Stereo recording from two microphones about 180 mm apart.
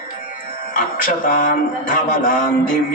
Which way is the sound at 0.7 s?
50° left (ahead or behind).